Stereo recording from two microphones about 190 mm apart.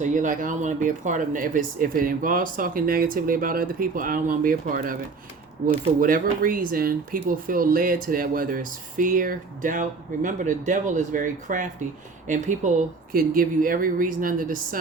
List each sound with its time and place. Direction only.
0.0 s speech: 40° right (ahead or behind)